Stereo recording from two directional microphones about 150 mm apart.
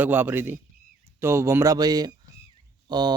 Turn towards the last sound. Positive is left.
turn(degrees=-30)  # may be behind; listen again after turning